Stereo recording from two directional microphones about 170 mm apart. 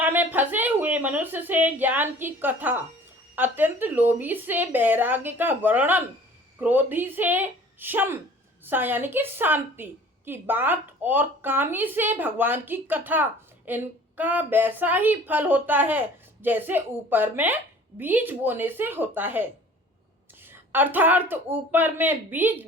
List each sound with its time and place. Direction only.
0.0 s a woman's voice: 10° right (ahead or behind)